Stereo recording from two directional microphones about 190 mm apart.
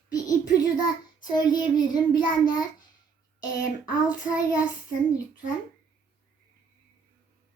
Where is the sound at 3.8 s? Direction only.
20° left (ahead or behind).